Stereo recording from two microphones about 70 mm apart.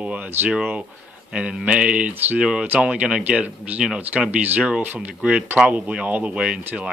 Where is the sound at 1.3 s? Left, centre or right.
Centre.